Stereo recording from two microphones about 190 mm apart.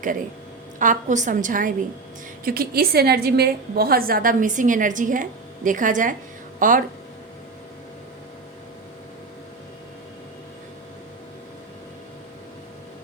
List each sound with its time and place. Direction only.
0.8 s a woman's voice: 40° right (ahead or behind)